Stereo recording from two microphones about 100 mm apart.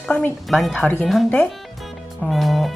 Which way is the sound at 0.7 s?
15° left (ahead or behind).